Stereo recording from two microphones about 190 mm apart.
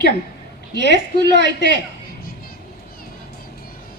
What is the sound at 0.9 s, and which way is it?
Speech, 65° right (ahead or behind).